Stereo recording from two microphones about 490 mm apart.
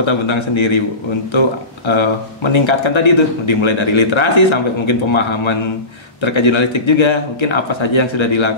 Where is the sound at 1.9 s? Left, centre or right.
Left.